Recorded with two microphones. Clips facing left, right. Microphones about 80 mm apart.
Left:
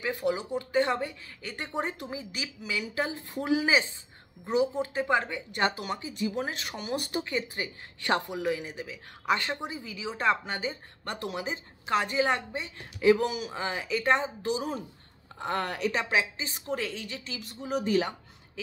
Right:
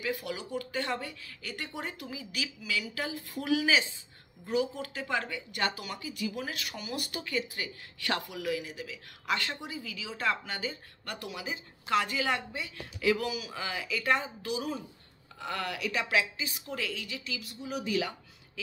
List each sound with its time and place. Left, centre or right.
0.0 s speech: left